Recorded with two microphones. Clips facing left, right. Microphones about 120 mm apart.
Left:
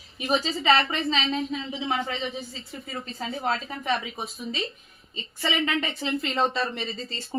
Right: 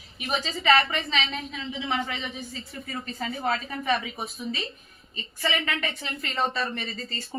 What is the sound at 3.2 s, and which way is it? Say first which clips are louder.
Speech: even; 20° left (ahead or behind).